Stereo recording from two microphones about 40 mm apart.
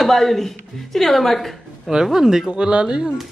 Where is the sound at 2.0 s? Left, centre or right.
Centre.